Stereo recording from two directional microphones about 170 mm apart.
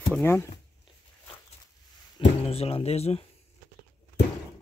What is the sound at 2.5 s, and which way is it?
Speech, 35° left (ahead or behind).